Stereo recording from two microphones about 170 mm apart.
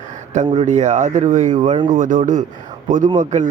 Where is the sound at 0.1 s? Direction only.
45° right (ahead or behind).